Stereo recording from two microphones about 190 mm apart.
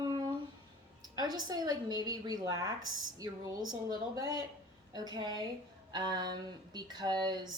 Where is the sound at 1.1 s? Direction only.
20° right (ahead or behind).